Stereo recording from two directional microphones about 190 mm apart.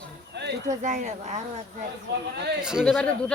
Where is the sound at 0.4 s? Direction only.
65° right (ahead or behind).